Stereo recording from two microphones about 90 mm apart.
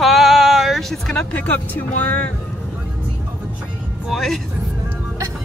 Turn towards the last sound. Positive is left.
turn(degrees=0)  # may be behind; listen again after turning